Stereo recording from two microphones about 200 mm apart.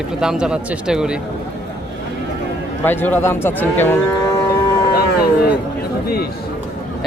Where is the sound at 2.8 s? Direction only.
10° left (ahead or behind).